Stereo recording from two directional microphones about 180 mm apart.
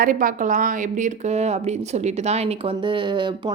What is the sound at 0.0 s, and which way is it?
A woman's voice, 50° right (ahead or behind).